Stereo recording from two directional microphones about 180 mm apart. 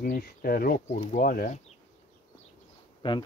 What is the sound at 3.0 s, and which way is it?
Speech, 25° left (ahead or behind).